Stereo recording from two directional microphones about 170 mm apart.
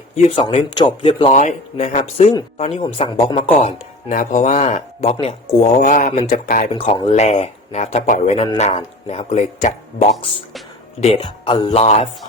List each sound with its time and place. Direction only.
0.3 s speech: 30° left (ahead or behind)
1.4 s speech: 45° left (ahead or behind)
6.7 s speech: 30° left (ahead or behind)
7.1 s speech: 40° left (ahead or behind)